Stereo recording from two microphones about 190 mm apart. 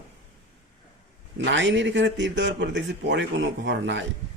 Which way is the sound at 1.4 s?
75° right (ahead or behind).